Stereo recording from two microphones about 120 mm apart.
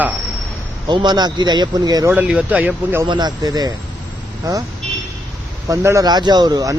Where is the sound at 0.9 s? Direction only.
40° right (ahead or behind).